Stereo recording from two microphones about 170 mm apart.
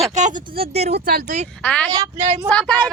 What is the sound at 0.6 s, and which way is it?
Speech, 35° right (ahead or behind).